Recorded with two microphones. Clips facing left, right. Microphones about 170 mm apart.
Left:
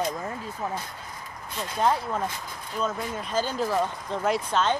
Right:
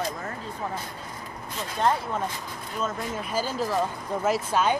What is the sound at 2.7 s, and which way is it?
Speech, 5° right (ahead or behind).